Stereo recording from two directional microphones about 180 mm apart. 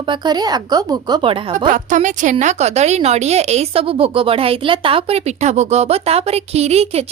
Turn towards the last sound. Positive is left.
turn(degrees=-35)  # may be behind; listen again after turning